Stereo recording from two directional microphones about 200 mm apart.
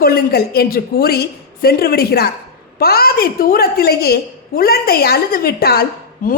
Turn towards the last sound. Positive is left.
turn(degrees=45)  # may be behind; listen again after turning